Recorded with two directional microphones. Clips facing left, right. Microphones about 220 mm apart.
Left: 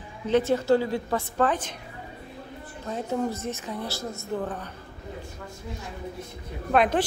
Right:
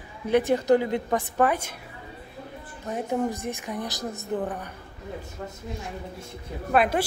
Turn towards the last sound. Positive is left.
turn(degrees=-10)  # may be behind; listen again after turning